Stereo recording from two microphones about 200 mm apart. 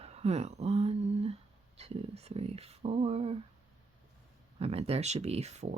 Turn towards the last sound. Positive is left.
turn(degrees=-35)  # may be behind; listen again after turning